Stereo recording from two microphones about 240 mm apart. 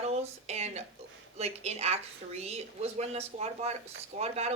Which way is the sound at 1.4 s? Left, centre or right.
Right.